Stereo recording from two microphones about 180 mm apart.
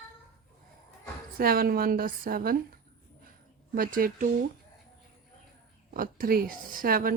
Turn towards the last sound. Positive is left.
turn(degrees=-55)  # may be behind; listen again after turning